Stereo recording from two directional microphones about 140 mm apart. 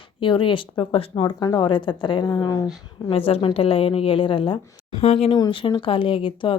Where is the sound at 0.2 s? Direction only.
35° left (ahead or behind).